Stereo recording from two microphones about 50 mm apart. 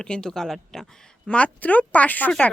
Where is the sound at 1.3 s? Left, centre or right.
Left.